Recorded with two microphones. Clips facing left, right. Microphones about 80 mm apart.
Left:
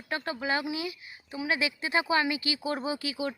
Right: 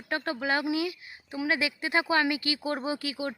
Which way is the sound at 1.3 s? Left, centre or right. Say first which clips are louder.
Right 1 dB; right.